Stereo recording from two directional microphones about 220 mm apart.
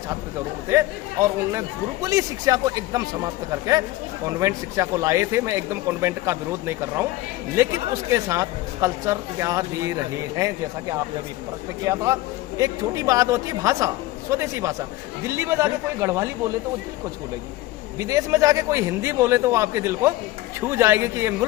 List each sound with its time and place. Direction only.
0.7 s speech: 15° right (ahead or behind)
11.9 s speech: 15° right (ahead or behind)
18.0 s speech: 15° right (ahead or behind)